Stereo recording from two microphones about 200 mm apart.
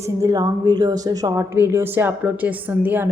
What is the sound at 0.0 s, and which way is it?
A woman's voice, 15° right (ahead or behind).